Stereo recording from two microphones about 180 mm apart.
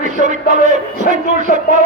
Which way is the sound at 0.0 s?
45° right (ahead or behind).